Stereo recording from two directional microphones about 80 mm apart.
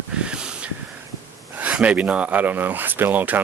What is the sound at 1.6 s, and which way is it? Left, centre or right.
Speech, centre.